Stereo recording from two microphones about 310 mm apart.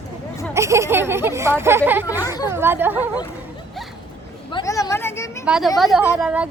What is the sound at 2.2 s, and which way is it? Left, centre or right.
Speech, centre.